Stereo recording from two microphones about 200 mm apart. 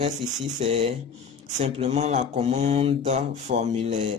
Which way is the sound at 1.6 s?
30° right (ahead or behind).